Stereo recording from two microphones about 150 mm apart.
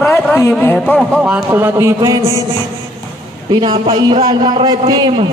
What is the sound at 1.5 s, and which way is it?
Speech, 15° right (ahead or behind).